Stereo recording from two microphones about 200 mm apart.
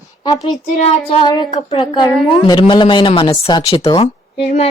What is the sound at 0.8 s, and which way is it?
A woman's voice, 25° left (ahead or behind).